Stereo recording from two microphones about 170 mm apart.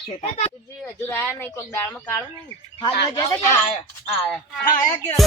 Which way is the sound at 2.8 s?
25° left (ahead or behind).